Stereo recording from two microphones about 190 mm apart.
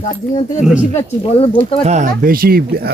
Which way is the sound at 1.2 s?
30° left (ahead or behind).